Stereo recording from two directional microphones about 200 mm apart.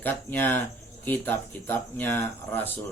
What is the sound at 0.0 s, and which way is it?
A man's voice, 10° left (ahead or behind).